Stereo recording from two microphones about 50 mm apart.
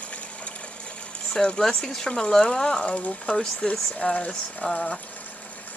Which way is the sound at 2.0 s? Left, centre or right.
Centre.